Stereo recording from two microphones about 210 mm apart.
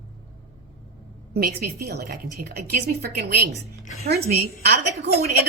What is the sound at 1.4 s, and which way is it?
Speech, 45° right (ahead or behind).